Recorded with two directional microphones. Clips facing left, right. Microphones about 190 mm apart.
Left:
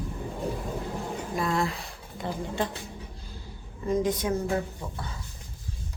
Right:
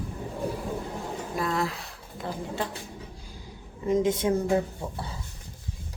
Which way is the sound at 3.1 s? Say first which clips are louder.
Even; 10° right (ahead or behind).